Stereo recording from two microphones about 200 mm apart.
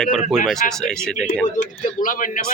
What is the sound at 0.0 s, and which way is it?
Speech, centre (ahead or behind).